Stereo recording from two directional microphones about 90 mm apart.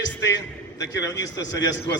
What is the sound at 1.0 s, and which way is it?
Speech, 40° left (ahead or behind).